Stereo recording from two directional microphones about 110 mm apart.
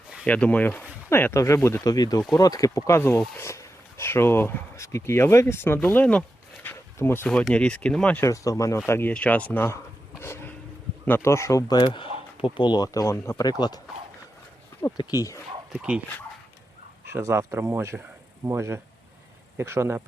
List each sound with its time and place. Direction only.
0.3 s speech: 10° left (ahead or behind)
1.1 s speech: 25° left (ahead or behind)
6.7 s a sound: 20° left (ahead or behind)
7.3 s speech: 5° left (ahead or behind)
8.2 s speech: 30° left (ahead or behind)
8.9 s speech: 20° left (ahead or behind)
9.1 s a sound: 10° left (ahead or behind)
11.0 s speech: 20° left (ahead or behind)
11.7 s speech: 45° left (ahead or behind)
14.9 s speech: 35° left (ahead or behind)
15.7 s speech: 5° right (ahead or behind)
17.1 s speech: 20° right (ahead or behind)